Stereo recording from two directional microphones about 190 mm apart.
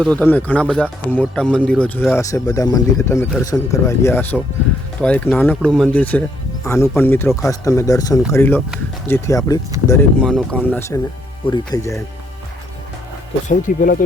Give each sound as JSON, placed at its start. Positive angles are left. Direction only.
{"t": 0.0, "sound": "a man's voice", "side_deg": 5}
{"t": 13.5, "sound": "speech", "side_deg": 45}